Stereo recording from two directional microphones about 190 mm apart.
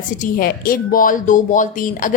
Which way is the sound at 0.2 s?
50° left (ahead or behind).